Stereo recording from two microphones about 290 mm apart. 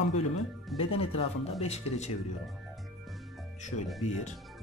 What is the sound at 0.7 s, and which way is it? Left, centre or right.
Speech, centre.